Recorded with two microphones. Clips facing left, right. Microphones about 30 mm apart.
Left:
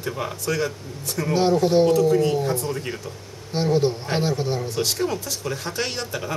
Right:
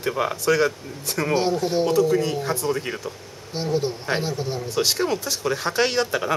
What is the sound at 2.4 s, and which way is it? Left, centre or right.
Speech, right.